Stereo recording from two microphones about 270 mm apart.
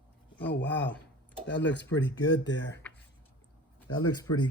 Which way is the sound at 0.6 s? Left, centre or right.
Left.